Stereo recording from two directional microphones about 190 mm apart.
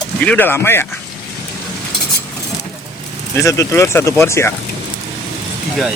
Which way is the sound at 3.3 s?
15° left (ahead or behind).